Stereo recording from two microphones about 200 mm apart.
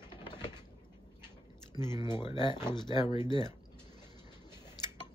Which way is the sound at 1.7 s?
20° left (ahead or behind).